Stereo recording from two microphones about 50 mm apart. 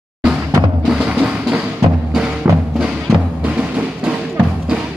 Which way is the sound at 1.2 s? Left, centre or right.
Centre.